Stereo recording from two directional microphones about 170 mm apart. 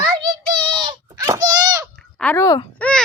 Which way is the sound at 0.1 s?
25° right (ahead or behind).